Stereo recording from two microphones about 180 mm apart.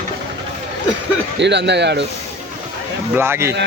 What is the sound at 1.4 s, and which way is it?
Speech, 70° right (ahead or behind).